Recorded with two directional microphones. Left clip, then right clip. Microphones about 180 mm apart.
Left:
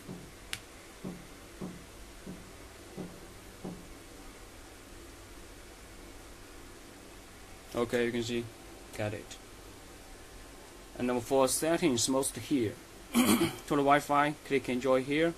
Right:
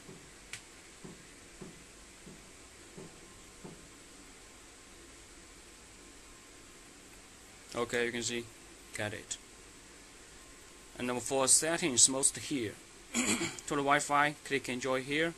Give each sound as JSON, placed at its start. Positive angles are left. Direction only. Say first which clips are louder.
{"t": 7.7, "sound": "speech", "louder": "left 3 dB", "side_deg": -5}
{"t": 11.0, "sound": "speech", "louder": "left 5 dB", "side_deg": -10}
{"t": 13.1, "sound": "speech", "louder": "left 6 dB", "side_deg": 15}
{"t": 13.5, "sound": "speech", "louder": "left 4 dB", "side_deg": 0}